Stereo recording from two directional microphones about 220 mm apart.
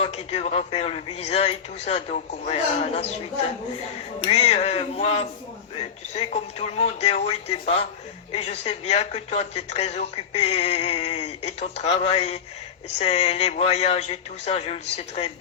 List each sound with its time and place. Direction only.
0.0 s a man's voice: 25° left (ahead or behind)
4.2 s a man's voice: 30° left (ahead or behind)